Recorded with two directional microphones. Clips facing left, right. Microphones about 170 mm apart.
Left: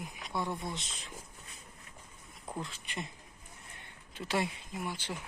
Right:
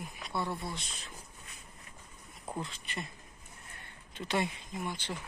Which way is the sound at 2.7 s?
15° left (ahead or behind).